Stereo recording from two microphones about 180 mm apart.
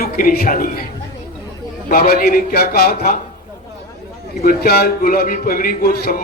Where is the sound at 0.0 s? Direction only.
55° left (ahead or behind).